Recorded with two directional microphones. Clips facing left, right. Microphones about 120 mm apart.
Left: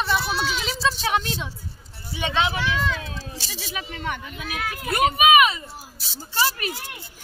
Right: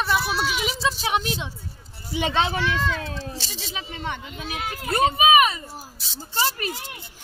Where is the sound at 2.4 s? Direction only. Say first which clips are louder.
Left 2 dB; 35° right (ahead or behind).